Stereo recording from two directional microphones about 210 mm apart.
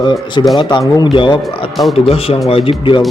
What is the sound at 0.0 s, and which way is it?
Speech, 20° left (ahead or behind).